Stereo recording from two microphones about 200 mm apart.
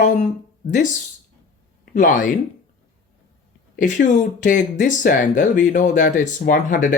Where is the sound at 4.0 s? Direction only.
40° left (ahead or behind).